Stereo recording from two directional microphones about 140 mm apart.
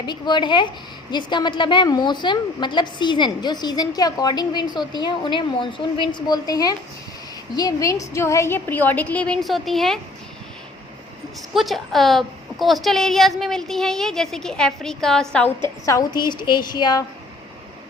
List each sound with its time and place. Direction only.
0.0 s a woman's voice: 30° left (ahead or behind); by 10.0 s centre (ahead or behind)
11.5 s a woman's voice: centre (ahead or behind); by 17.0 s 30° left (ahead or behind)